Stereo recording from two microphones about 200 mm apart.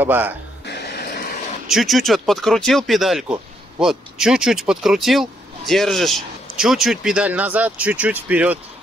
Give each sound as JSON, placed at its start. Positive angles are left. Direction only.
{"t": 0.0, "sound": "speech", "side_deg": -10}
{"t": 0.7, "sound": "music", "side_deg": 55}
{"t": 1.7, "sound": "speech", "side_deg": 0}